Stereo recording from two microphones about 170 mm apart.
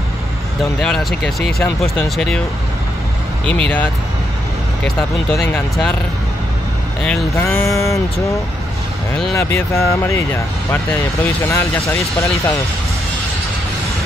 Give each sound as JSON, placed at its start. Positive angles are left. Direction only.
{"t": 0.7, "sound": "speech", "side_deg": 5}
{"t": 3.4, "sound": "speech", "side_deg": 10}
{"t": 7.0, "sound": "speech", "side_deg": 5}
{"t": 7.3, "sound": "speech", "side_deg": 15}